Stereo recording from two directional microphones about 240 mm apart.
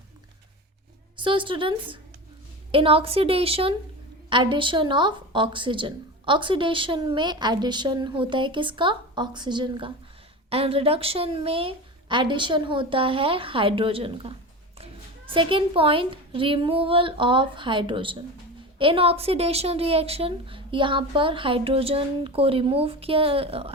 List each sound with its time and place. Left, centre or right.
1.1 s speech: right